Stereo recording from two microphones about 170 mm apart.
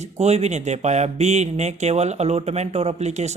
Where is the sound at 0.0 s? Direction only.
40° right (ahead or behind).